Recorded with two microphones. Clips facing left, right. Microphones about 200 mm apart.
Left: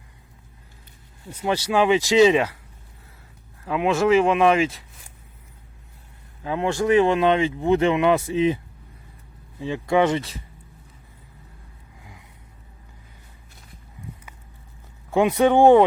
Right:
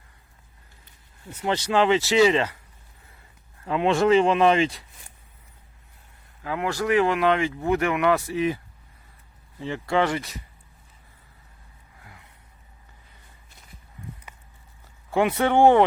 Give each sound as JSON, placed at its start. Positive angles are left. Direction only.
{"t": 1.3, "sound": "speech", "side_deg": 10}
{"t": 3.6, "sound": "speech", "side_deg": 5}
{"t": 6.4, "sound": "speech", "side_deg": 25}
{"t": 15.1, "sound": "speech", "side_deg": 15}